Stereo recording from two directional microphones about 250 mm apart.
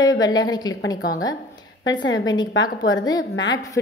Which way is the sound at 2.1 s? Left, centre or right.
Centre.